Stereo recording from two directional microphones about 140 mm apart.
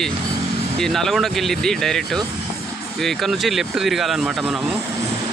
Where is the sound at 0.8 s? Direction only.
Centre (ahead or behind).